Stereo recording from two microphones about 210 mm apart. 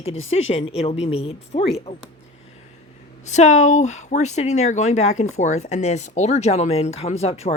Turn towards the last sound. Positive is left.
turn(degrees=30)  # may be behind; listen again after turning